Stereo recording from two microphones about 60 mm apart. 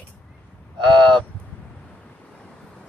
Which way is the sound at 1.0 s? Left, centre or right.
Centre.